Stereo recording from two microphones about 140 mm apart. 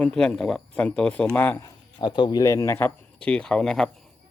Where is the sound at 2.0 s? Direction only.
35° left (ahead or behind); by 3.8 s 5° left (ahead or behind).